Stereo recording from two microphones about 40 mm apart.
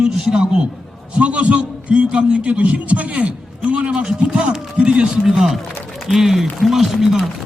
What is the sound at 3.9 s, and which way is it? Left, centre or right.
Speech, right.